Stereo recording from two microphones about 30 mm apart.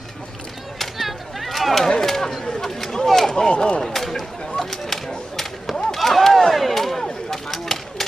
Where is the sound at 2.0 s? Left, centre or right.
Centre.